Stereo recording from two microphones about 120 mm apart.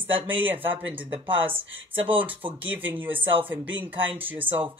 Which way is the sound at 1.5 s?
50° right (ahead or behind).